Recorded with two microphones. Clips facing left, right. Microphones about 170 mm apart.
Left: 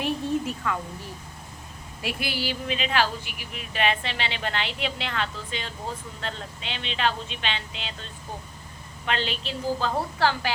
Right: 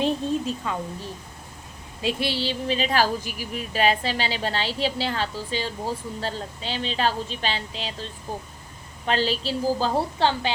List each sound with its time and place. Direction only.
0.7 s a woman's voice: 20° right (ahead or behind)
2.0 s speech: 25° right (ahead or behind)